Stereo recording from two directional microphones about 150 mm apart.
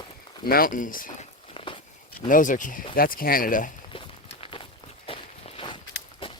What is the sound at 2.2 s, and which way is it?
Speech, 60° left (ahead or behind).